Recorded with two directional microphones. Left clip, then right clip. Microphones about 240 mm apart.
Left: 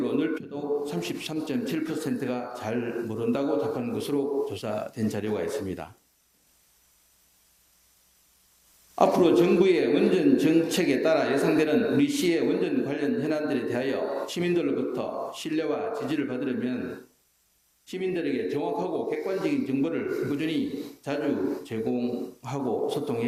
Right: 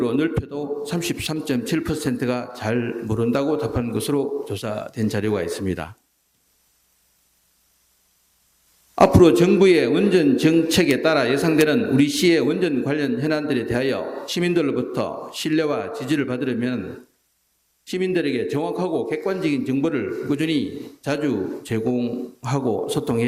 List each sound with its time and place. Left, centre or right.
0.0 s a man's voice: right
9.0 s a man's voice: right
17.8 s a man's voice: right